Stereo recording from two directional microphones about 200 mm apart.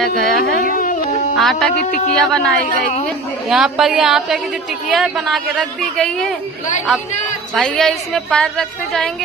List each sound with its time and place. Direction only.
0.3 s a woman's voice: centre (ahead or behind)
0.8 s music: 45° left (ahead or behind)
1.4 s a woman's voice: centre (ahead or behind)
1.8 s speech: 35° left (ahead or behind)
2.1 s a woman's voice: 5° left (ahead or behind)
7.5 s a woman's voice: centre (ahead or behind)